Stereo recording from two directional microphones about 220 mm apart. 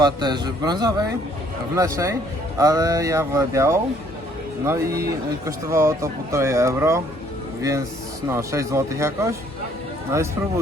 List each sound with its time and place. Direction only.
0.0 s a man's voice: 20° right (ahead or behind)
8.3 s speech: 15° right (ahead or behind)